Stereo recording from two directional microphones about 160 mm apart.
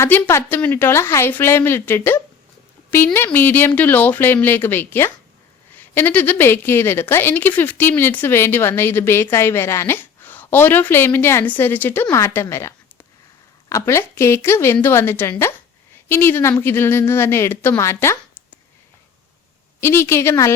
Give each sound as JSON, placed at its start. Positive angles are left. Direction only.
{"t": 0.0, "sound": "a woman's voice", "side_deg": 15}
{"t": 19.8, "sound": "a woman's voice", "side_deg": 15}